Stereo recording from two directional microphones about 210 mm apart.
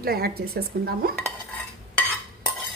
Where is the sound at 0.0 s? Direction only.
45° right (ahead or behind).